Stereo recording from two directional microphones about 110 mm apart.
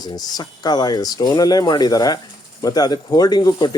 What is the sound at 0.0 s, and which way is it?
Speech, 35° left (ahead or behind).